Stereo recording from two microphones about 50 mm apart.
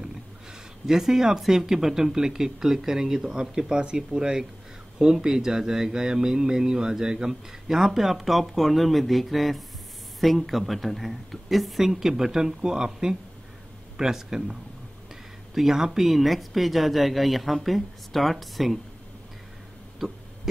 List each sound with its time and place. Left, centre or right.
0.8 s speech: centre
20.0 s speech: centre